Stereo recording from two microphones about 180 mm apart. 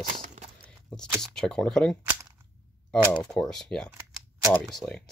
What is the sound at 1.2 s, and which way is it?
Speech, 5° left (ahead or behind).